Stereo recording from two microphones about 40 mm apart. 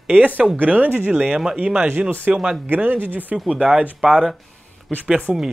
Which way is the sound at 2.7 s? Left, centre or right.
Right.